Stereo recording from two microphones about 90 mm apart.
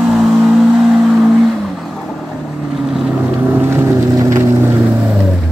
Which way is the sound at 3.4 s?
25° right (ahead or behind).